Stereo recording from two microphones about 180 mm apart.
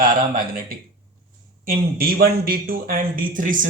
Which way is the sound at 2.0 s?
55° right (ahead or behind).